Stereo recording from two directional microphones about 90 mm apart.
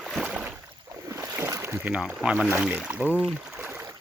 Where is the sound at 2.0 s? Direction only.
10° right (ahead or behind).